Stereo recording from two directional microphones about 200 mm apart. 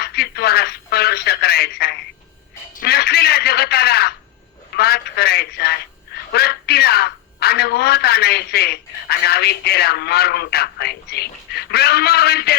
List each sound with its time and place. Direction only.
0.0 s a man's voice: 55° left (ahead or behind)